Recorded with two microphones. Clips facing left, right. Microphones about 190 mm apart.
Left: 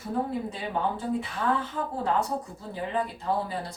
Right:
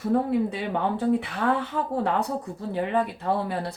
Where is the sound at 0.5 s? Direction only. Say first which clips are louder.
Right 3 dB; 65° right (ahead or behind).